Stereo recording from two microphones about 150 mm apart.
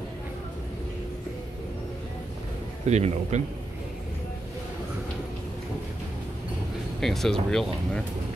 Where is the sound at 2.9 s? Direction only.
50° right (ahead or behind).